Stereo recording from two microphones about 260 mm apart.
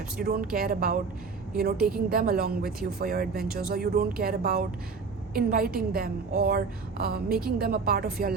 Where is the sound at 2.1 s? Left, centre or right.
Right.